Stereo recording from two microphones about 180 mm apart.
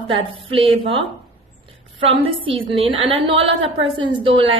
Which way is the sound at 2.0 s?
30° right (ahead or behind).